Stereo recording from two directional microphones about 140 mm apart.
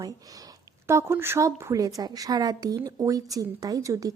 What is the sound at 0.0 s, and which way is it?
Speech, 25° right (ahead or behind).